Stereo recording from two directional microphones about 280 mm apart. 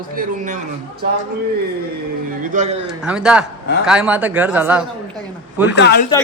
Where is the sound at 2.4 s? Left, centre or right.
Right.